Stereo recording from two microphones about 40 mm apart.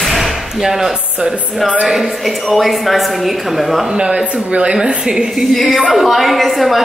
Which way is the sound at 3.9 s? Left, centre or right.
Centre.